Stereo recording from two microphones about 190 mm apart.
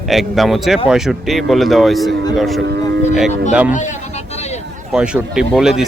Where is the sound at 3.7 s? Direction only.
40° left (ahead or behind).